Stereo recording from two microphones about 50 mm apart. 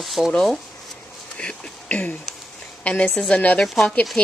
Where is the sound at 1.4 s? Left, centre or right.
Left.